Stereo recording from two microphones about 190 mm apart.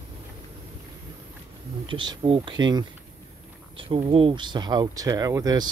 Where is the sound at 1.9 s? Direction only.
25° right (ahead or behind).